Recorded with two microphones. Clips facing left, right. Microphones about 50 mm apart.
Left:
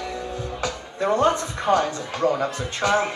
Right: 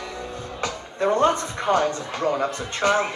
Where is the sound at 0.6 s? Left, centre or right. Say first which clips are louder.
Right 2 dB; right.